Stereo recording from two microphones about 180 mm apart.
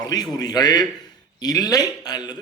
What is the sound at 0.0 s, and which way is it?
A man's voice, 20° left (ahead or behind).